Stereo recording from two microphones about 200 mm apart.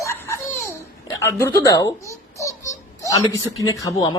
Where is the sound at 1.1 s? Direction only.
15° left (ahead or behind).